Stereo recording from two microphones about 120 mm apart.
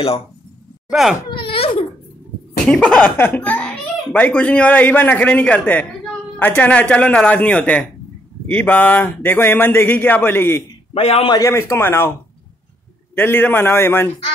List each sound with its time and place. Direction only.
0.8 s speech: 5° right (ahead or behind)
1.3 s baby cry: 45° left (ahead or behind)
2.6 s a child's voice: 10° left (ahead or behind)
10.9 s a man's voice: 55° left (ahead or behind)
11.2 s a man's voice: 30° left (ahead or behind)
13.1 s a man's voice: 20° left (ahead or behind)